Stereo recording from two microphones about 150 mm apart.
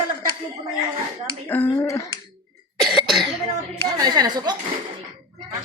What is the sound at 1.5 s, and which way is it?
Speech, 15° left (ahead or behind).